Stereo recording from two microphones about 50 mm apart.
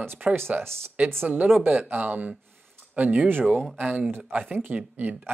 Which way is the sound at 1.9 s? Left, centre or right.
Right.